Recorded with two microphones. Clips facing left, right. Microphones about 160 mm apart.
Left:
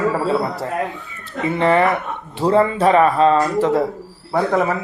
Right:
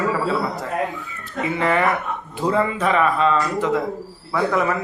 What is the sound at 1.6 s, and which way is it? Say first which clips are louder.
A man's voice: left 4 dB; 30° left (ahead or behind).